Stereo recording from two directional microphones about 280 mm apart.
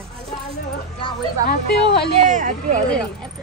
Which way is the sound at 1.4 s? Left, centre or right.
Left.